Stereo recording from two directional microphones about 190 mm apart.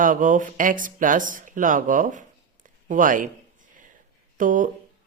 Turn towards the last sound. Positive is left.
turn(degrees=-45)  # may be behind; listen again after turning